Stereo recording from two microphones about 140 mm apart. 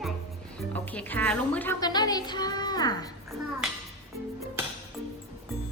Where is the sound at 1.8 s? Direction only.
30° left (ahead or behind).